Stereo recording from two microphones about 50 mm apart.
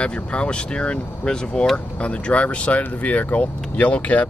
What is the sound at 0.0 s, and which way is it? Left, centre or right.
Speech, left.